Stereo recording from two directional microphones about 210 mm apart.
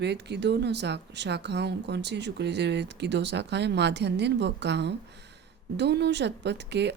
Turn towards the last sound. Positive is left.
turn(degrees=-55)  # may be behind; listen again after turning